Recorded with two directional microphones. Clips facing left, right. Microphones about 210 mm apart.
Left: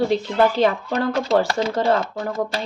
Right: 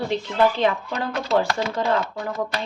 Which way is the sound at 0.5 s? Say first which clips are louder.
Left 4 dB; 40° left (ahead or behind).